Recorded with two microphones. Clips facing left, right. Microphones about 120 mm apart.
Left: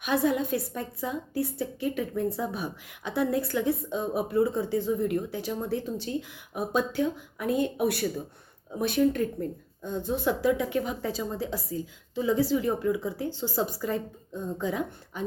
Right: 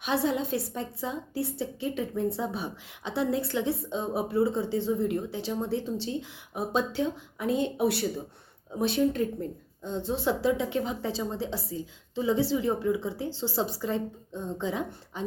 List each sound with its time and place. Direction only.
0.0 s a woman's voice: 30° right (ahead or behind)
9.0 s a woman's voice: 25° right (ahead or behind)